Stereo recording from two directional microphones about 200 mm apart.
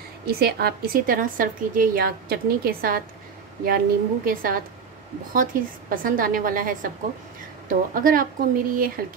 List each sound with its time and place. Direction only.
0.3 s a woman's voice: 50° right (ahead or behind)
7.9 s a woman's voice: 45° right (ahead or behind)